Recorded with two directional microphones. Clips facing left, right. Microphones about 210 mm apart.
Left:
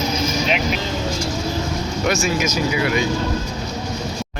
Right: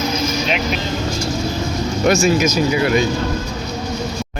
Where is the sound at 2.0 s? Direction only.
40° right (ahead or behind).